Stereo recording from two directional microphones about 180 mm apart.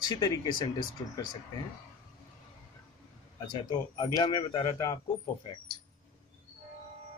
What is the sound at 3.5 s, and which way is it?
Speech, 25° left (ahead or behind).